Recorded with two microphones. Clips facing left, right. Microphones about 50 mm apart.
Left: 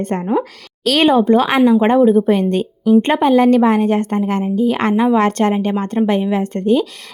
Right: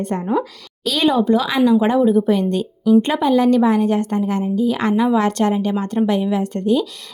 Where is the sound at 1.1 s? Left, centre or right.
Left.